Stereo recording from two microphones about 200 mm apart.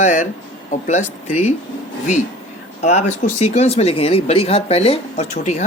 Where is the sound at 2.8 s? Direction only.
35° left (ahead or behind).